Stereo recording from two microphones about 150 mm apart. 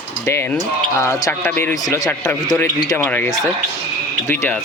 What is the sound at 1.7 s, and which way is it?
A man's voice, 25° left (ahead or behind).